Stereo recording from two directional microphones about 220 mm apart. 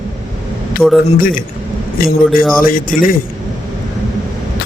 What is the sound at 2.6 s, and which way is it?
Speech, 40° left (ahead or behind).